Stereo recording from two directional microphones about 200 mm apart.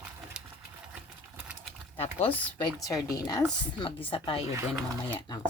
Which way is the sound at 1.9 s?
30° left (ahead or behind).